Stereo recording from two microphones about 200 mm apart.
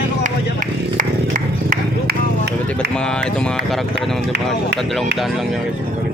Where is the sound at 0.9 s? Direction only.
45° right (ahead or behind).